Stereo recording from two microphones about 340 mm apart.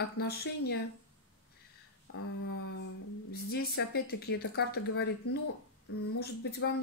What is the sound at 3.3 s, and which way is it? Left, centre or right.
Speech, left.